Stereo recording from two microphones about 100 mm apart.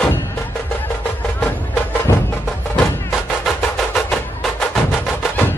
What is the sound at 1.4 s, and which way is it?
Music, 15° left (ahead or behind).